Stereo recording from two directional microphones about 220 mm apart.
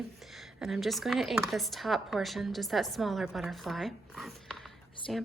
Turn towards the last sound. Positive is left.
turn(degrees=5)  # may be behind; listen again after turning